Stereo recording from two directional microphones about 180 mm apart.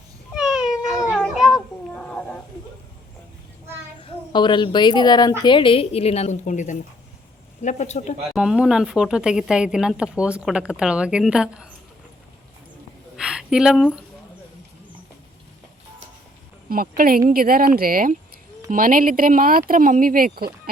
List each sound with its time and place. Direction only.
0.3 s cat: 5° right (ahead or behind)
4.0 s a woman's voice: 25° left (ahead or behind)
8.4 s speech: 5° right (ahead or behind)
13.1 s a sound: 5° right (ahead or behind)
16.6 s speech: 55° right (ahead or behind)